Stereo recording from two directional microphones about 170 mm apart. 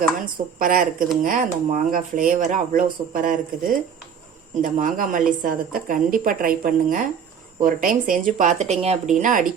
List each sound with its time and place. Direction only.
0.3 s a woman's voice: 55° right (ahead or behind)